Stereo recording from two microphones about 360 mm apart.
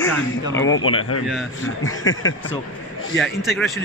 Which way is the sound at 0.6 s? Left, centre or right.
Left.